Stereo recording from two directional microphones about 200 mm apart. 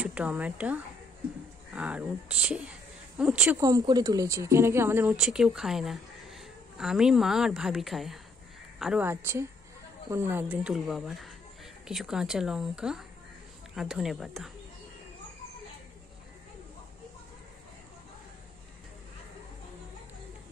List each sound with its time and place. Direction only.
0.0 s a woman's voice: 5° right (ahead or behind)